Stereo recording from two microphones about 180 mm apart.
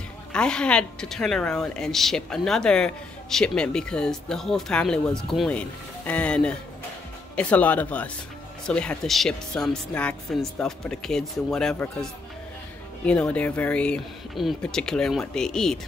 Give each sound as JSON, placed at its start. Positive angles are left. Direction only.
{"t": 0.3, "sound": "a woman's voice", "side_deg": 5}